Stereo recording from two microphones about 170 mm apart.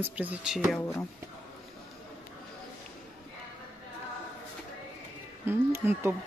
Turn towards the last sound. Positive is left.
turn(degrees=-15)  # may be behind; listen again after turning